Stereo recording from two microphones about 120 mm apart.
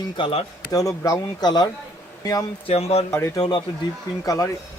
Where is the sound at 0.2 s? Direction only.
50° left (ahead or behind).